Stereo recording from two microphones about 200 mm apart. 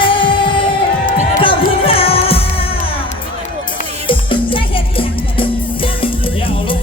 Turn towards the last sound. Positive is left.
turn(degrees=25)  # may be behind; listen again after turning